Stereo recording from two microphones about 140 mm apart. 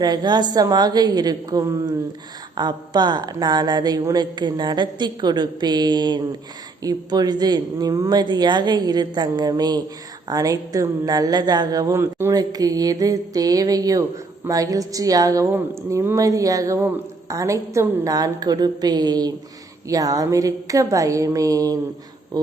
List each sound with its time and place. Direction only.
0.0 s a woman's voice: 30° right (ahead or behind)